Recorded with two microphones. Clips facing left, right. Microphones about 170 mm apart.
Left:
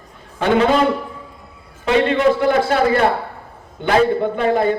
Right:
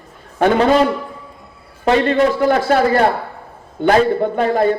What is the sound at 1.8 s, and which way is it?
A woman's voice, 45° right (ahead or behind).